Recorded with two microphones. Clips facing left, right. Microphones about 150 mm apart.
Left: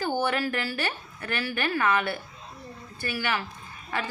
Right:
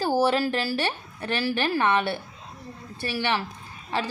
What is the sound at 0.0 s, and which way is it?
A woman's voice, 35° right (ahead or behind).